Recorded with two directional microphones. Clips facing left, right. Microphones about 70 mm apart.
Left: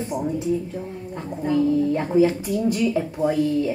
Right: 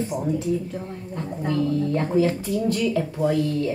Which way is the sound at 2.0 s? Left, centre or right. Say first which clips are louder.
Left 2 dB; centre.